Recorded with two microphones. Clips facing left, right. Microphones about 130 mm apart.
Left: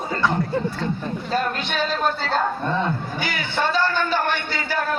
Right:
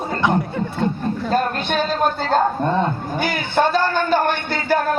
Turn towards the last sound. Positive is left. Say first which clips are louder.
# right 5 dB
turn(degrees=-50)  # may be behind; listen again after turning